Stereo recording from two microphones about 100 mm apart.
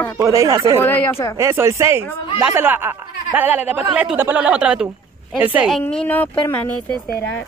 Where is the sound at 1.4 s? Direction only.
30° right (ahead or behind).